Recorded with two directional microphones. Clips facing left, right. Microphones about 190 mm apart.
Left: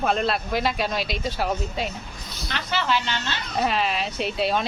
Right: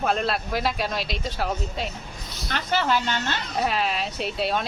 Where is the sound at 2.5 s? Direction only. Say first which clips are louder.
Right 2 dB; 45° right (ahead or behind).